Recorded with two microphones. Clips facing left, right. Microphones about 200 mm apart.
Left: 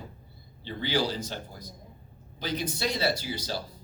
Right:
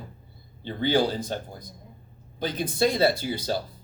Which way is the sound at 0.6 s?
55° right (ahead or behind).